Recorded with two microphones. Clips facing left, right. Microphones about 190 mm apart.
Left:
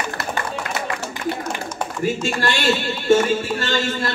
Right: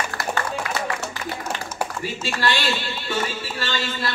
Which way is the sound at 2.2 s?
50° left (ahead or behind).